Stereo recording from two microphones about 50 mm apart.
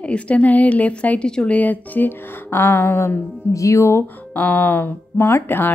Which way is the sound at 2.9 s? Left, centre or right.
Left.